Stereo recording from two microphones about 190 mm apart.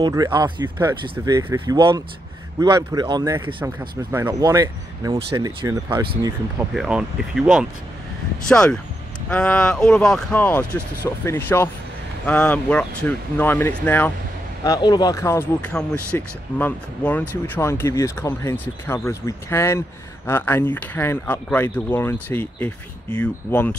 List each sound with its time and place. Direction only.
0.0 s speech: 20° right (ahead or behind)
6.7 s speech: 5° right (ahead or behind)
14.6 s speech: 20° left (ahead or behind)